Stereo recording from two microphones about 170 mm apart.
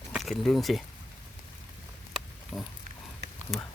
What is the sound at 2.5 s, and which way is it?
Pig, 20° left (ahead or behind).